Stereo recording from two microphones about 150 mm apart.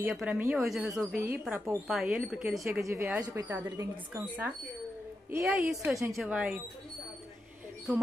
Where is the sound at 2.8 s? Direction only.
15° right (ahead or behind).